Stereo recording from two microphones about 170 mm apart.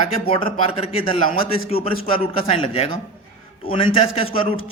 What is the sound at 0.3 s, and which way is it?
A man's voice, 35° left (ahead or behind).